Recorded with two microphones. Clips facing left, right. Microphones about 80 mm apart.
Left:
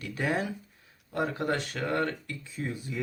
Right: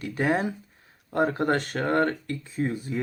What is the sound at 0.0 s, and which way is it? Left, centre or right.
Speech, right.